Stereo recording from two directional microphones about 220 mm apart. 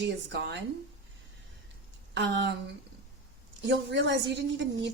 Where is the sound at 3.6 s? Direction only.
55° right (ahead or behind).